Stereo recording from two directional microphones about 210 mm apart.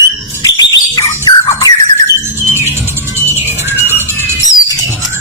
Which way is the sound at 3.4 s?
10° right (ahead or behind).